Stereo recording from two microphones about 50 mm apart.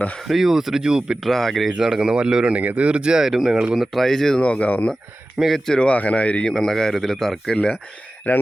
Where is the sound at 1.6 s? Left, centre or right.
Centre.